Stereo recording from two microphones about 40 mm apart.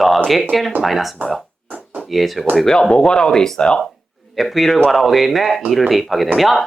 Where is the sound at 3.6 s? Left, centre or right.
Left.